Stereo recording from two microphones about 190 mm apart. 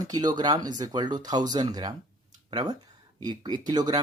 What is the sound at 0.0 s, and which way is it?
Speech, 20° right (ahead or behind).